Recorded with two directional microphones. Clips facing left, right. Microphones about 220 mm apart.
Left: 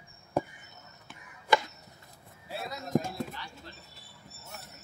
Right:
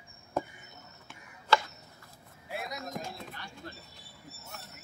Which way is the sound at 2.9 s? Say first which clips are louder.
Left 10 dB; 45° left (ahead or behind).